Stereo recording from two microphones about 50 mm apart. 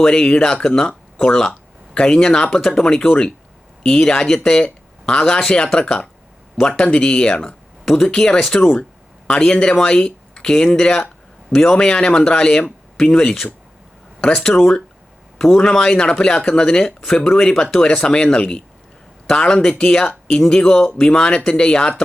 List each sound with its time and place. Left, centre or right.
0.0 s speech: centre